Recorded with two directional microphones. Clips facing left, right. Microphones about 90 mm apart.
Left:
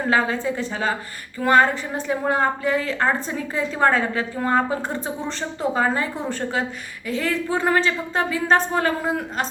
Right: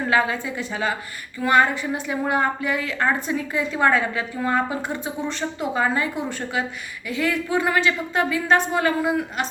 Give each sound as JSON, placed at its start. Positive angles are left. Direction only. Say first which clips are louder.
{"t": 0.1, "sound": "a woman's voice", "louder": "left 1 dB", "side_deg": 35}